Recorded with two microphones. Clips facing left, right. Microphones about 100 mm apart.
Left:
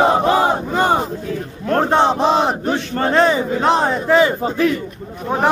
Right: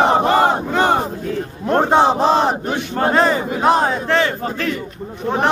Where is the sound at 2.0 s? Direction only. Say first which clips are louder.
Right 1 dB; centre (ahead or behind).